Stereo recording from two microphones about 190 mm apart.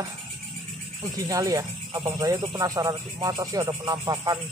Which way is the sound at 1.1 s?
20° right (ahead or behind).